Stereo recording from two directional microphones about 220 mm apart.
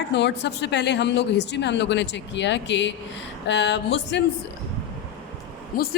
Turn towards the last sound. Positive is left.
turn(degrees=45)  # may be behind; listen again after turning